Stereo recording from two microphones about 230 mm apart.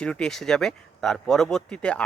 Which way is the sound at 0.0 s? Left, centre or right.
Centre.